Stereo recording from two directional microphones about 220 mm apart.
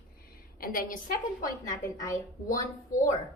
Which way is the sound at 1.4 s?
15° left (ahead or behind).